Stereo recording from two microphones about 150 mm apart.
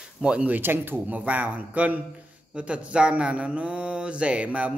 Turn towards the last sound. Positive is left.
turn(degrees=-10)  # may be behind; listen again after turning